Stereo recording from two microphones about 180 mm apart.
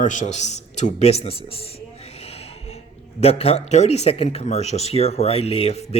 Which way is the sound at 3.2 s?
35° left (ahead or behind).